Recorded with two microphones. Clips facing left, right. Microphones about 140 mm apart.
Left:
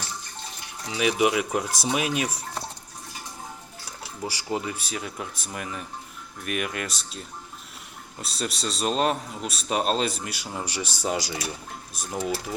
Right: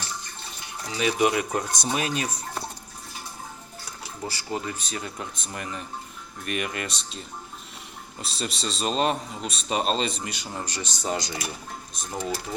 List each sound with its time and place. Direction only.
0.9 s speech: 5° left (ahead or behind)
4.2 s speech: 15° left (ahead or behind)